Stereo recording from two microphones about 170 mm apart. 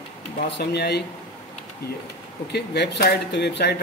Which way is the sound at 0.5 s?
75° left (ahead or behind).